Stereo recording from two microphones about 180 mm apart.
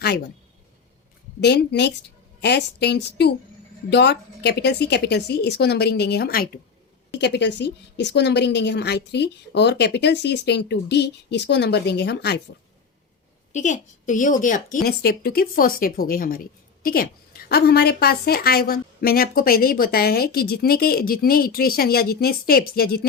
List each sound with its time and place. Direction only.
1.4 s a woman's voice: 70° left (ahead or behind); by 6.6 s 55° left (ahead or behind)
7.1 s a woman's voice: 75° left (ahead or behind)
13.5 s a woman's voice: 45° left (ahead or behind)